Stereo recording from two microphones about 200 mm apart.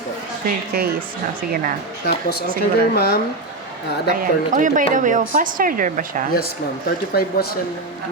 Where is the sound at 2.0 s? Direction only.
55° left (ahead or behind).